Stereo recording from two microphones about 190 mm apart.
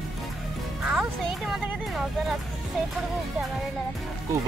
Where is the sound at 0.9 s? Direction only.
5° right (ahead or behind).